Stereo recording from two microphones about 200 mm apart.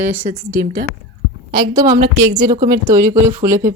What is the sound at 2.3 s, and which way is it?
Speech, 20° right (ahead or behind).